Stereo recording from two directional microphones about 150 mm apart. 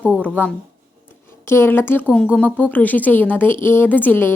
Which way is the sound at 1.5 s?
15° left (ahead or behind).